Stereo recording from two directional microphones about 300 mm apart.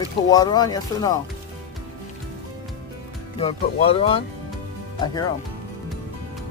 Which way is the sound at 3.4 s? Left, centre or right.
Centre.